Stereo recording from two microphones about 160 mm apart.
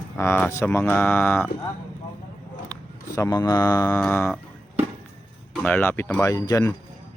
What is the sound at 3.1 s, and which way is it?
Speech, 20° left (ahead or behind).